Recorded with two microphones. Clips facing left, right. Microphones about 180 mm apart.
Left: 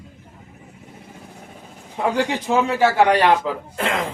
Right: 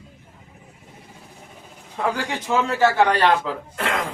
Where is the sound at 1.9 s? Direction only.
20° left (ahead or behind).